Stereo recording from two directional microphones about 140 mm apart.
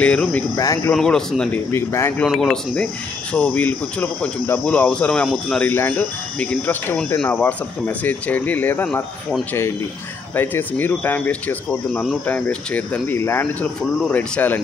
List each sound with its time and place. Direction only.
0.0 s speech: 10° left (ahead or behind)
0.6 s speech: 25° left (ahead or behind)
0.9 s a man's voice: 5° left (ahead or behind)
1.7 s speech: 20° left (ahead or behind)
2.2 s a man's voice: centre (ahead or behind)
3.3 s speech: 10° left (ahead or behind)